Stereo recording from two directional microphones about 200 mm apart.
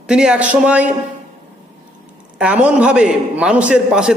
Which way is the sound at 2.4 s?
5° right (ahead or behind).